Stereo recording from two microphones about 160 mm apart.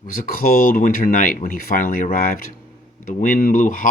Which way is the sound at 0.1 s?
60° left (ahead or behind).